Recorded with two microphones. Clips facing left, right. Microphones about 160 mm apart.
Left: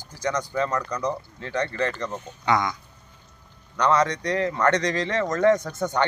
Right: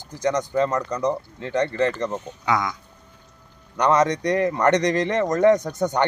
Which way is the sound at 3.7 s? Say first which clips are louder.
Right 3 dB; 20° right (ahead or behind).